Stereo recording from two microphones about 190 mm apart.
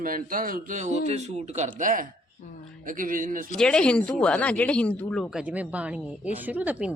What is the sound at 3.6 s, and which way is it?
Speech, 5° left (ahead or behind).